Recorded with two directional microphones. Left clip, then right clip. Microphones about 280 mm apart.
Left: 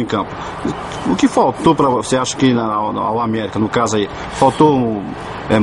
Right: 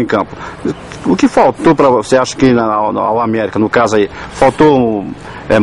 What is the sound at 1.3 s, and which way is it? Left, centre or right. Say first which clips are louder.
Speech: right 4 dB; centre.